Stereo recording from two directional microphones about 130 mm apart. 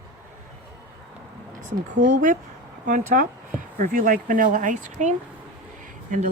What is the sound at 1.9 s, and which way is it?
Speech, 80° right.